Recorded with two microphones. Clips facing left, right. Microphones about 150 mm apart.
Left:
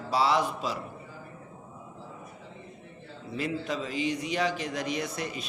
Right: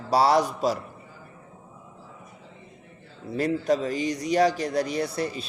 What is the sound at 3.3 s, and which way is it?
A man's voice, 40° right (ahead or behind).